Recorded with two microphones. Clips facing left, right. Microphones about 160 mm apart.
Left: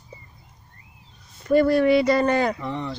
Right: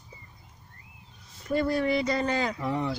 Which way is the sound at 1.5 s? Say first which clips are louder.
Left 9 dB; 75° left (ahead or behind).